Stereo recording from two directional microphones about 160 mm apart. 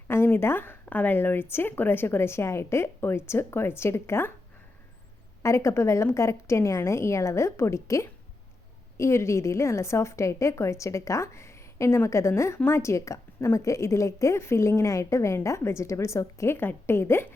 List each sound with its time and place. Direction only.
0.1 s a woman's voice: 15° left (ahead or behind)
5.4 s a woman's voice: 15° left (ahead or behind)